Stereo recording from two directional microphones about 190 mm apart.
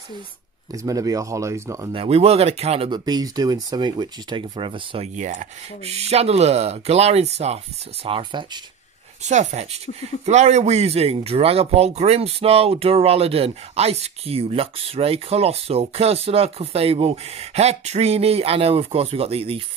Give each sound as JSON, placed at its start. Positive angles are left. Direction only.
{"t": 0.7, "sound": "speech", "side_deg": -20}
{"t": 1.9, "sound": "speech", "side_deg": -30}
{"t": 9.2, "sound": "speech", "side_deg": -35}